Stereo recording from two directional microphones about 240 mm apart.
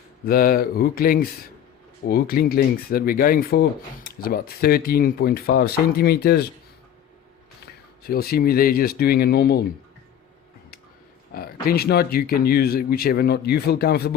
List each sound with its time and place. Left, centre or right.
0.3 s speech: left
8.0 s speech: left
11.6 s speech: left